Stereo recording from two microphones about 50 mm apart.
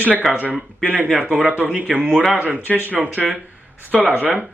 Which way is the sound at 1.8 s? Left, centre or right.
Right.